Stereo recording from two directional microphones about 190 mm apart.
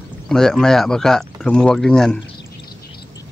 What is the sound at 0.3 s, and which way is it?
Speech, 5° left (ahead or behind).